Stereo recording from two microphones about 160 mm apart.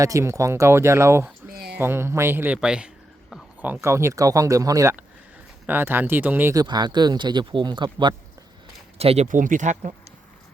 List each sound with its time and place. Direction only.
0.0 s speech: 20° right (ahead or behind)
1.5 s a sound: 80° right
1.8 s speech: 15° right (ahead or behind)
9.0 s speech: 40° right (ahead or behind)